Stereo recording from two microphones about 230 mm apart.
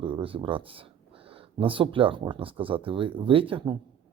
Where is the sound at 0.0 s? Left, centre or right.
Right.